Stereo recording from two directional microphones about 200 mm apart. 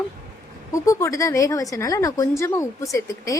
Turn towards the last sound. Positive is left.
turn(degrees=15)  # may be behind; listen again after turning